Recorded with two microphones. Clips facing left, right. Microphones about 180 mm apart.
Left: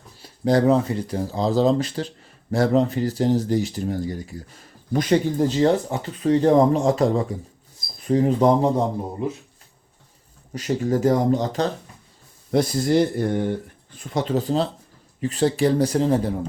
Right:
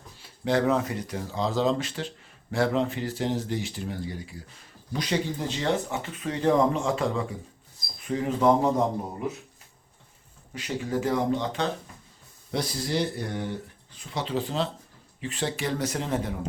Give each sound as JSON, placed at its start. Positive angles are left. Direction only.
{"t": 0.2, "sound": "speech", "side_deg": 40}
{"t": 10.5, "sound": "speech", "side_deg": 45}